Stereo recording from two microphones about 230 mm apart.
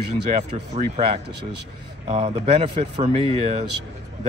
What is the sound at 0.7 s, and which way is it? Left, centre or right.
A man's voice, right.